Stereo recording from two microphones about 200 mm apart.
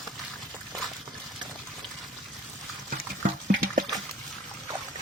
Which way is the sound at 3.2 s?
45° right (ahead or behind).